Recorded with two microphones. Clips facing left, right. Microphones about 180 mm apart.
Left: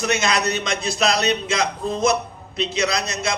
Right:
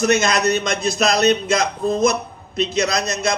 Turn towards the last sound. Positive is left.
turn(degrees=-40)  # may be behind; listen again after turning